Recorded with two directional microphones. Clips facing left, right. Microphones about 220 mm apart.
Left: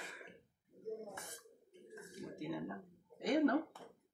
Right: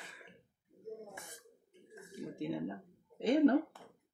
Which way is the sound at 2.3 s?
30° right (ahead or behind).